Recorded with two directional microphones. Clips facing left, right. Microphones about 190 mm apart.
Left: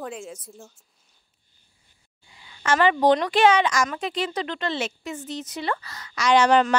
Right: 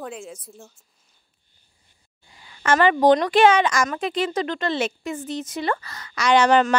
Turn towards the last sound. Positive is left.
turn(degrees=-50)  # may be behind; listen again after turning